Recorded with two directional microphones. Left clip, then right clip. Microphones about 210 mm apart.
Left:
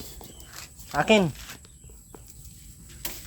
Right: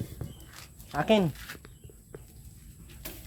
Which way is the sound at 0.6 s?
25° left (ahead or behind).